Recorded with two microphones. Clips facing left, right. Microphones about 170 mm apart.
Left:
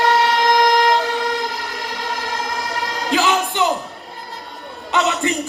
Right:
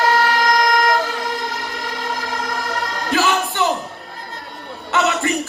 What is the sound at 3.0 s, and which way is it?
Music, 15° left (ahead or behind).